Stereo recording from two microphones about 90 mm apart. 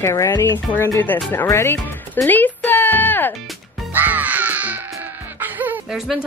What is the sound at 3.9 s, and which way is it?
Music, 20° right (ahead or behind).